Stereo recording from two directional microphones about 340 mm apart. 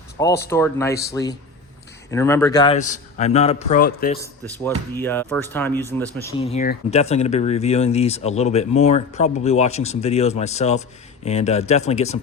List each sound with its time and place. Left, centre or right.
0.2 s a man's voice: centre; by 4.2 s left
4.6 s speech: centre